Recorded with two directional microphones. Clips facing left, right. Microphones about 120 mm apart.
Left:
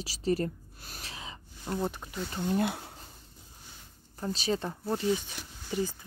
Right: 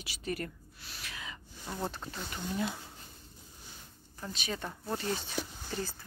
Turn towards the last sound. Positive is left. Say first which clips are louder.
# left 6 dB
turn(degrees=15)  # may be behind; listen again after turning